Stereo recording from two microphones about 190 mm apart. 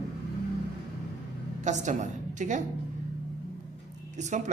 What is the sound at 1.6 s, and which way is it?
Speech, 40° right (ahead or behind).